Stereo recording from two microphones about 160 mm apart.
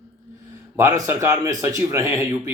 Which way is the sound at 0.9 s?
20° right (ahead or behind).